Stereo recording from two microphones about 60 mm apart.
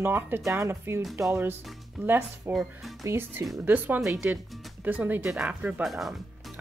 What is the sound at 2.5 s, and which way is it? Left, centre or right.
Speech, right.